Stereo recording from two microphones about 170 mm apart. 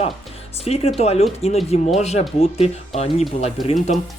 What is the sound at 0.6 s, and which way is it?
Speech, 35° left (ahead or behind).